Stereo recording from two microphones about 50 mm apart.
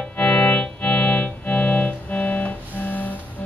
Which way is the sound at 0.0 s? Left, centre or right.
Left.